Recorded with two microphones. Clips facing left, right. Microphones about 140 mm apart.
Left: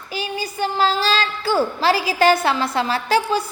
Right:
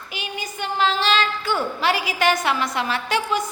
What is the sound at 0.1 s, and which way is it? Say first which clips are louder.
A woman's voice: left 6 dB; 35° left (ahead or behind).